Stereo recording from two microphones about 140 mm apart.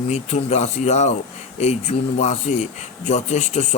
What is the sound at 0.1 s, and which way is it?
Speech, 55° left (ahead or behind).